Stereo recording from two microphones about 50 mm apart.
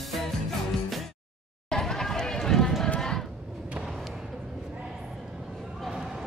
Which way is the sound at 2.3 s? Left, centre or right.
Centre.